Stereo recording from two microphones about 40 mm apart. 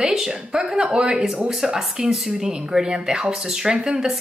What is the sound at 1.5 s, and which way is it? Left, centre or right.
Speech, centre.